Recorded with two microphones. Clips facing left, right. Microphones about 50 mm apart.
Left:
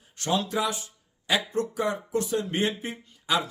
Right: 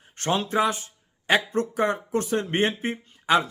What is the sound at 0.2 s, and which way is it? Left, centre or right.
Speech, right.